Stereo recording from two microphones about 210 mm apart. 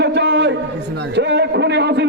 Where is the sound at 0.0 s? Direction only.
55° right (ahead or behind).